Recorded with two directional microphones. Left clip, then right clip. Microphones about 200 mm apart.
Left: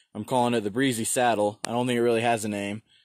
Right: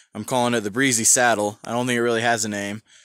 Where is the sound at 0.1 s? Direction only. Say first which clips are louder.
Right 3 dB; 15° right (ahead or behind).